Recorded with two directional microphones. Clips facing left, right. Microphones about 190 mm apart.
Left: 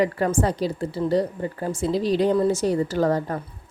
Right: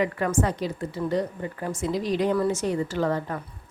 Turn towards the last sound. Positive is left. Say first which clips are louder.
# left 4 dB
turn(degrees=40)  # may be behind; listen again after turning